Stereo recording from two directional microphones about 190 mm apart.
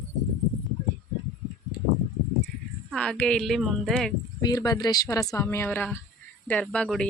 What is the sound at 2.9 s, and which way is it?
Speech, 5° left (ahead or behind).